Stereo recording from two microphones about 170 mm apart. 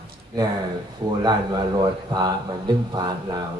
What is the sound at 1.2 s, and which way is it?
Speech, 25° right (ahead or behind).